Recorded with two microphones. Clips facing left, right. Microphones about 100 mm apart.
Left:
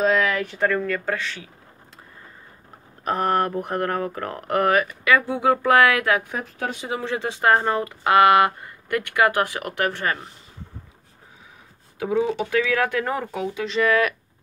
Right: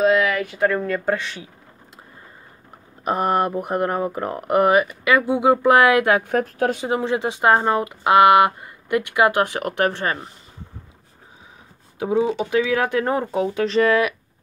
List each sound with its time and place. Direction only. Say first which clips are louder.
0.0 s speech: right 3 dB; 10° right (ahead or behind)
0.7 s speech: right 3 dB; 20° right (ahead or behind)
3.1 s speech: right 2 dB; 15° right (ahead or behind)
6.2 s speech: right 8 dB; 55° right (ahead or behind)
6.8 s speech: right 5 dB; 25° right (ahead or behind)
12.0 s speech: right 2 dB; 20° right (ahead or behind)
13.6 s speech: right 3 dB; 40° right (ahead or behind)